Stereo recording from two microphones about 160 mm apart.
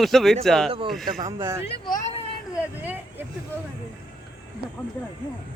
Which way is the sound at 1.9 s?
45° left (ahead or behind).